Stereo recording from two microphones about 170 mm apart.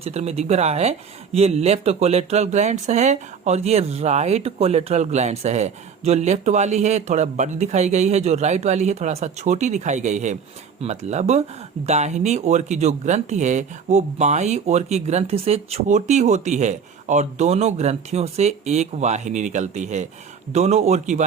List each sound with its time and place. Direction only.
0.0 s speech: 40° right (ahead or behind)